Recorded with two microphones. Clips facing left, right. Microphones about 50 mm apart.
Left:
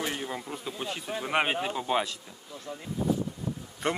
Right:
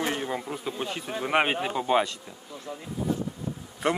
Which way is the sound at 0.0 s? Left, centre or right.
Centre.